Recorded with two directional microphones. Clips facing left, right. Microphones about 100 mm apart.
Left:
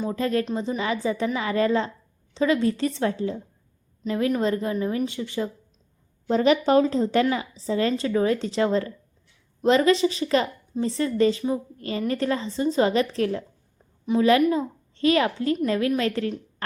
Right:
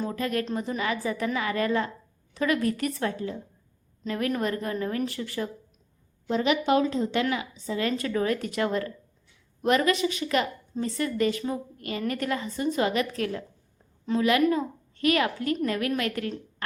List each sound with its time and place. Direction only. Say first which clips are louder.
0.1 s a woman's voice: left 4 dB; 30° left (ahead or behind)
6.2 s a woman's voice: left 4 dB; 40° left (ahead or behind)